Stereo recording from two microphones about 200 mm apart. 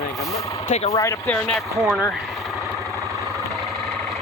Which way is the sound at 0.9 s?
15° left (ahead or behind).